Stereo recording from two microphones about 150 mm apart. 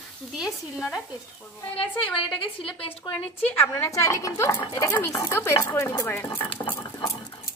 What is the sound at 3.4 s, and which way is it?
Speech, 15° left (ahead or behind).